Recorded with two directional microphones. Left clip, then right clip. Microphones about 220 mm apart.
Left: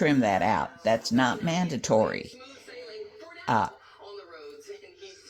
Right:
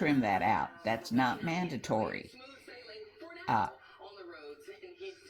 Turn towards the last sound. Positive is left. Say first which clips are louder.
# left 5 dB
turn(degrees=45)  # may be behind; listen again after turning